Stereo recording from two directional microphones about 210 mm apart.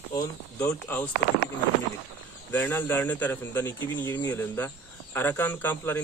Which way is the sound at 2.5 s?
10° left (ahead or behind).